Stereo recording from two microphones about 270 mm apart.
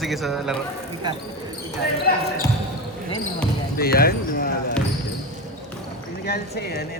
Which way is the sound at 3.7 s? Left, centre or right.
Left.